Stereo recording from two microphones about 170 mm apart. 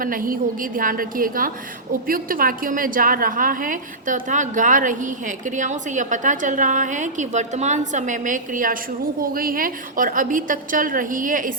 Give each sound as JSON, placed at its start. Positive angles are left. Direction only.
{"t": 0.0, "sound": "a woman's voice", "side_deg": -55}